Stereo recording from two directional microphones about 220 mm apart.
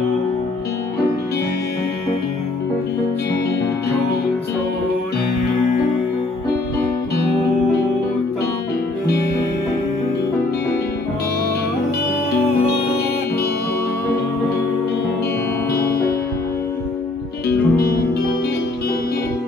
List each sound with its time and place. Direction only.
15.7 s music: 45° left (ahead or behind)
17.5 s music: 45° left (ahead or behind)